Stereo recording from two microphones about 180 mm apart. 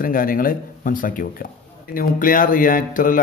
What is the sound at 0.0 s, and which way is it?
Speech, 50° left (ahead or behind).